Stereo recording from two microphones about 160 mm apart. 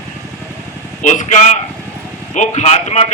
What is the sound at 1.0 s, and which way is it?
A man's voice, 50° left (ahead or behind).